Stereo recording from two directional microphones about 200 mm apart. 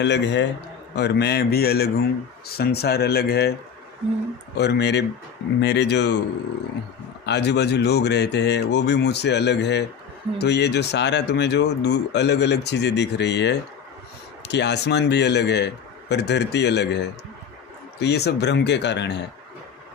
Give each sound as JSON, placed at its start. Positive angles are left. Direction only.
{"t": 0.0, "sound": "a man's voice", "side_deg": 60}
{"t": 4.5, "sound": "speech", "side_deg": 55}
{"t": 7.3, "sound": "speech", "side_deg": 60}
{"t": 18.0, "sound": "speech", "side_deg": 55}